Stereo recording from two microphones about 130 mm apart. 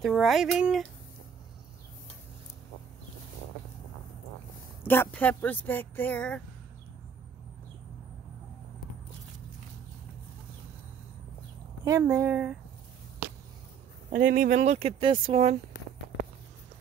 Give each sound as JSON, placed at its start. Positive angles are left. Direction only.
{"t": 0.0, "sound": "speech", "side_deg": 0}
{"t": 4.8, "sound": "speech", "side_deg": 15}
{"t": 11.8, "sound": "speech", "side_deg": -25}
{"t": 14.1, "sound": "speech", "side_deg": -90}